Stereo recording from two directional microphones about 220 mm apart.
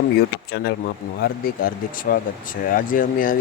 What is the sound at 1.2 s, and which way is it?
Speech, 40° left (ahead or behind).